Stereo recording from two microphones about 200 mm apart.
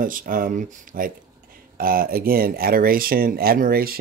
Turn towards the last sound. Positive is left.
turn(degrees=-50)  # may be behind; listen again after turning